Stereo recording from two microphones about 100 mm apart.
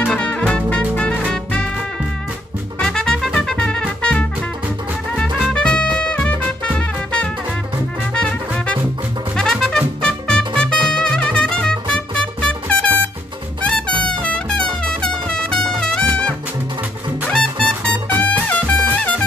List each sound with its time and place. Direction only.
0.0 s music: 10° left (ahead or behind)
2.8 s trumpet: 5° left (ahead or behind)
4.0 s music: 10° left (ahead or behind)
5.5 s music: 10° left (ahead or behind)
14.9 s brass instrument: 10° left (ahead or behind)
17.3 s music: 10° left (ahead or behind)